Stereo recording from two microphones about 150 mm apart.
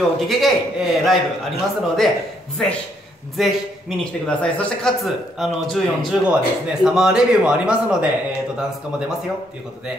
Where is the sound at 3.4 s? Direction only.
Centre (ahead or behind).